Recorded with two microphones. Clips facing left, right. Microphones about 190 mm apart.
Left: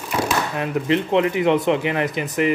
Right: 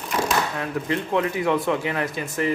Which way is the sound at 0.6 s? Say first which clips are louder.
Left 5 dB; 20° left (ahead or behind).